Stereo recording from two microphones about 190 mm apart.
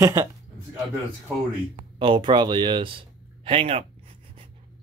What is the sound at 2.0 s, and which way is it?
Speech, 25° right (ahead or behind).